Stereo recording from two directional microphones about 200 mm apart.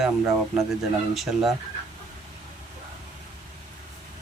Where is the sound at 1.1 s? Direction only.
Centre (ahead or behind).